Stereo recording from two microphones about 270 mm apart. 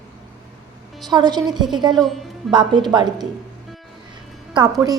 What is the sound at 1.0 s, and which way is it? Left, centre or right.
A woman's voice, centre.